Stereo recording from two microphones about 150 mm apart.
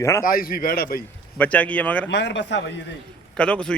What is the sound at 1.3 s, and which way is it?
Speech, 10° left (ahead or behind).